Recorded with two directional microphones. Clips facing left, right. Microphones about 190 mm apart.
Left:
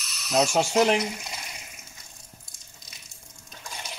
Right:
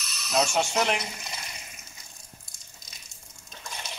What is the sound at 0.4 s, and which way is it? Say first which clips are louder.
Speech: left 4 dB; 35° left (ahead or behind).